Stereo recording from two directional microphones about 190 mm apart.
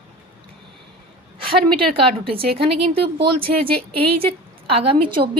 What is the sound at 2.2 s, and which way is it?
Speech, 30° right (ahead or behind).